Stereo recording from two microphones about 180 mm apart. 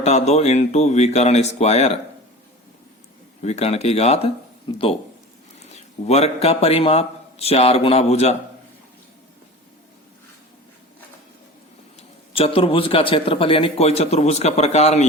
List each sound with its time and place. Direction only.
0.0 s a man's voice: 35° left (ahead or behind)
3.4 s a man's voice: 35° left (ahead or behind)
11.9 s a man's voice: 30° left (ahead or behind)